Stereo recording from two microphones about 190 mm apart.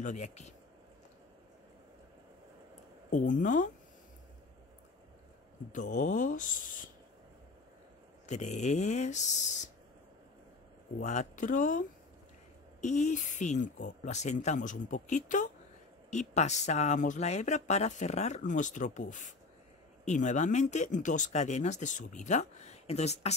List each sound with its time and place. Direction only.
0.0 s speech: 40° left (ahead or behind)
3.1 s speech: 40° left (ahead or behind)
5.7 s speech: 40° left (ahead or behind)
8.3 s speech: 35° left (ahead or behind)
11.0 s speech: 40° left (ahead or behind)
12.8 s speech: 40° left (ahead or behind)